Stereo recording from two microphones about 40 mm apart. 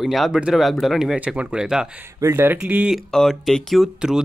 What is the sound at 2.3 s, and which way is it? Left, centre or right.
Speech, right.